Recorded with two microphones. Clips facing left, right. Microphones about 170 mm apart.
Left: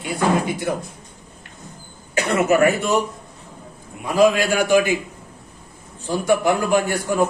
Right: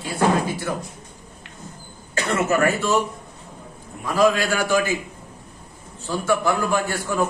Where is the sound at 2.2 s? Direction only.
15° left (ahead or behind).